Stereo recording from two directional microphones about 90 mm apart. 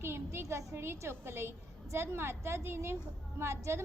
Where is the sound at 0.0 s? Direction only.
30° right (ahead or behind).